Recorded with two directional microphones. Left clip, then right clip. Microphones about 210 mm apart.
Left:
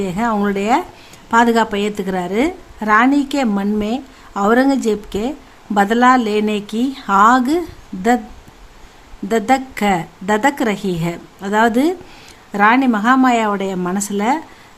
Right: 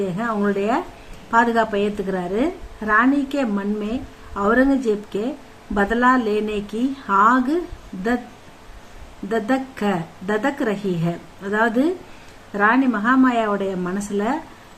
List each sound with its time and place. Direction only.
0.0 s a woman's voice: 50° left (ahead or behind)
9.3 s a woman's voice: 50° left (ahead or behind)